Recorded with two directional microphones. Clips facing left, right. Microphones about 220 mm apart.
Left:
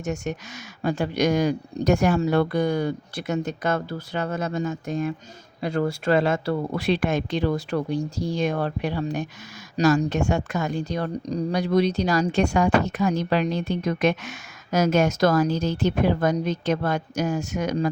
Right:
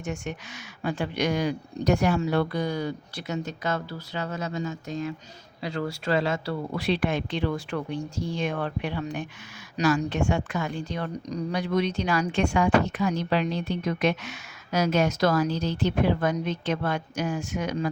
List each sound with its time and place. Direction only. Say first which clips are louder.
0.0 s speech: left 4 dB; 40° left (ahead or behind)